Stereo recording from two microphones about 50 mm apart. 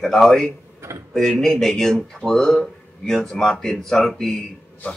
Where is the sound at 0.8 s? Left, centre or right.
Right.